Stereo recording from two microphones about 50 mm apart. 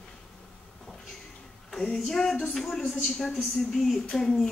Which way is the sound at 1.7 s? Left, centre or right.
Centre.